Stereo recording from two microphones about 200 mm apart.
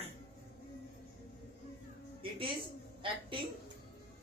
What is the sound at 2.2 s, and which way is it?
Speech, 25° right (ahead or behind).